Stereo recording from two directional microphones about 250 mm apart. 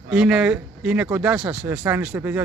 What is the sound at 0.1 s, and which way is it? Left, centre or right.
Speech, centre.